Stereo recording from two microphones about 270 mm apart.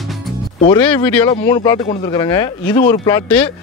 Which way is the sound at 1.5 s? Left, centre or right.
Centre.